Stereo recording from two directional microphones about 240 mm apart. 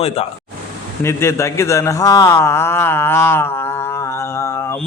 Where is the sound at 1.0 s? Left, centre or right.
Centre.